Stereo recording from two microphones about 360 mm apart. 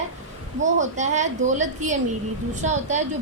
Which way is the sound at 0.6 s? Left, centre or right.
Centre.